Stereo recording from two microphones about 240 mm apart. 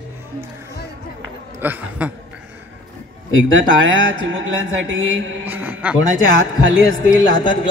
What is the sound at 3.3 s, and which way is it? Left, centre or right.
Speech, right.